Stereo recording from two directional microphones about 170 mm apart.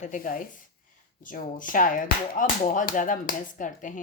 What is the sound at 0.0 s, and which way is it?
Speech, 55° left (ahead or behind).